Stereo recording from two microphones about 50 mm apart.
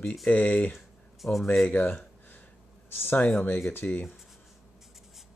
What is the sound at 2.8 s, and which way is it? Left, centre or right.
Speech, left.